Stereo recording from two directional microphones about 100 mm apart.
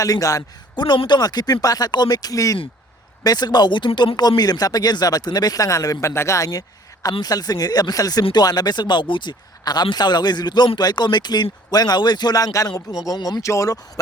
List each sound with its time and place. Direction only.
0.0 s speech: 35° left (ahead or behind)
0.9 s speech: 50° left (ahead or behind)
13.4 s speech: 30° left (ahead or behind)